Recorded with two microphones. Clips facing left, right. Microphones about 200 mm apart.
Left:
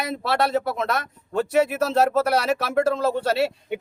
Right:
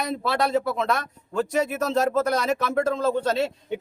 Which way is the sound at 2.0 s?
70° left (ahead or behind).